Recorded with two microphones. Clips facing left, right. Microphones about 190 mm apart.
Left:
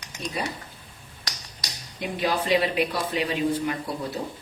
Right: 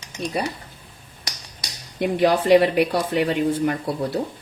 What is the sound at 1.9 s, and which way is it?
Speech, 60° right (ahead or behind).